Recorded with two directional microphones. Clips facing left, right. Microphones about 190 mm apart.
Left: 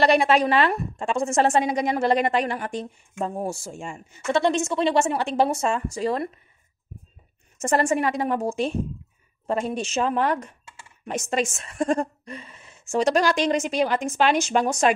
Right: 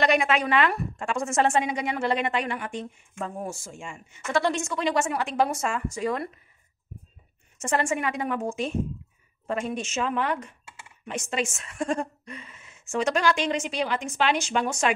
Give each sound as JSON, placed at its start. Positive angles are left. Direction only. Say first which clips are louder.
{"t": 0.0, "sound": "a woman's voice", "louder": "left 4 dB", "side_deg": 35}
{"t": 4.3, "sound": "a woman's voice", "louder": "left 4 dB", "side_deg": 20}
{"t": 7.5, "sound": "a woman's voice", "louder": "left 4 dB", "side_deg": 40}